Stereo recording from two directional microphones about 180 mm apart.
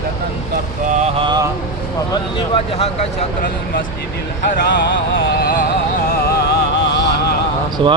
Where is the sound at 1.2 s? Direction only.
25° right (ahead or behind).